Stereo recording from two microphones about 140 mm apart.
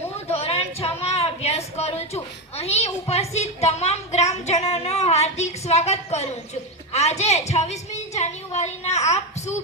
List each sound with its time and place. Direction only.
0.3 s a woman's voice: 45° left (ahead or behind)